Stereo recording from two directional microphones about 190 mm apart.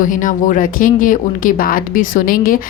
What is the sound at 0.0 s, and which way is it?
A woman's voice, 45° left (ahead or behind).